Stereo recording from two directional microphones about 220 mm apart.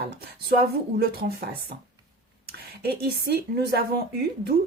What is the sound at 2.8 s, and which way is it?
Speech, 45° right (ahead or behind).